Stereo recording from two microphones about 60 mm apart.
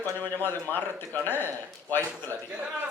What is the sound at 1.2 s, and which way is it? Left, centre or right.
Speech, left.